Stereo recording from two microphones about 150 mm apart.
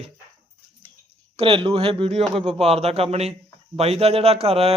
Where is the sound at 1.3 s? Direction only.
35° right (ahead or behind).